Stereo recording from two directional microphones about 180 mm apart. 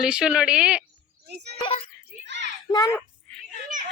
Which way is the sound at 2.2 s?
80° right.